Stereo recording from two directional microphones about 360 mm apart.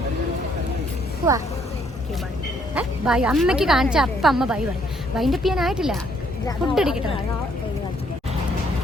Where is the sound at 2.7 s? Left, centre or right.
Centre.